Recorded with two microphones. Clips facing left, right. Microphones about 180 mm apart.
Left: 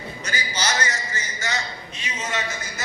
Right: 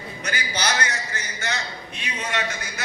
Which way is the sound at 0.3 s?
60° right (ahead or behind).